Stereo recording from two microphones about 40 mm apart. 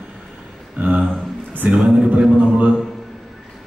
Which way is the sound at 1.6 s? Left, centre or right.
Right.